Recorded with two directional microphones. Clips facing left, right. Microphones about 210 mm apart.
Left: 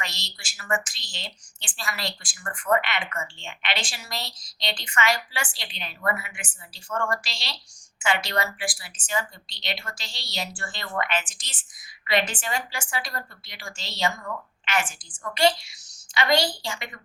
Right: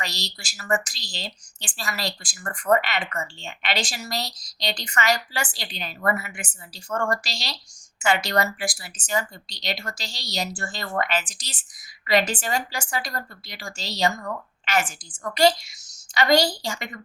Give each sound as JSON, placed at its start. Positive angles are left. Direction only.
{"t": 0.0, "sound": "a woman's voice", "side_deg": -35}